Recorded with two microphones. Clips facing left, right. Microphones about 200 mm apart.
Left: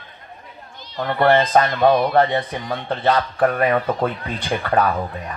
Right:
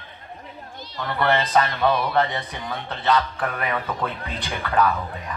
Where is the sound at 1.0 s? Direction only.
50° left (ahead or behind).